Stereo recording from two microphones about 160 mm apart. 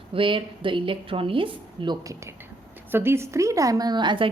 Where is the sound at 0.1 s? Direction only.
30° right (ahead or behind).